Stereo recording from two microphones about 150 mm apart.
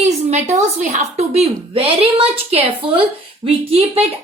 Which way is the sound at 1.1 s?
45° right (ahead or behind).